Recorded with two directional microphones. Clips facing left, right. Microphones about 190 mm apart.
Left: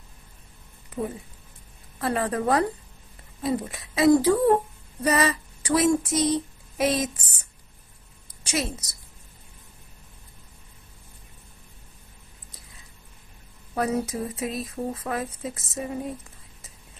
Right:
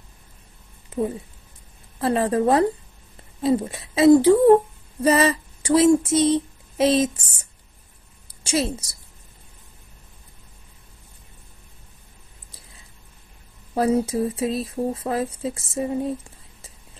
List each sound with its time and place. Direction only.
0.9 s speech: 25° right (ahead or behind)
8.5 s speech: 30° right (ahead or behind)
13.7 s speech: 30° right (ahead or behind)